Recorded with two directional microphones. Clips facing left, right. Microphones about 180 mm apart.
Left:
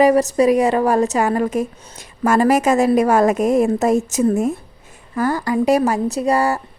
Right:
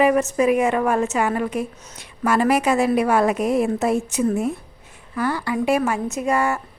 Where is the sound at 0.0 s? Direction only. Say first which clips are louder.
Left 4 dB; 35° left (ahead or behind).